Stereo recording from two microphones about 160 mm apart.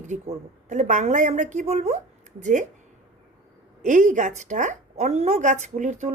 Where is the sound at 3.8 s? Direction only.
50° right (ahead or behind).